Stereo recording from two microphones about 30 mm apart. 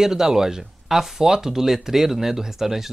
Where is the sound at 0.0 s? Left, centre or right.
Centre.